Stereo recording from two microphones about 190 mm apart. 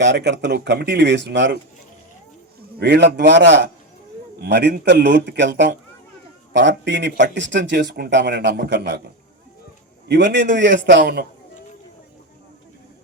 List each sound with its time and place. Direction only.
0.0 s speech: 70° right (ahead or behind)
2.7 s a man's voice: 65° right (ahead or behind)
10.1 s speech: 70° right (ahead or behind)